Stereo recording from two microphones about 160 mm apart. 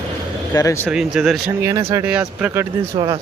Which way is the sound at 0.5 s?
20° left (ahead or behind).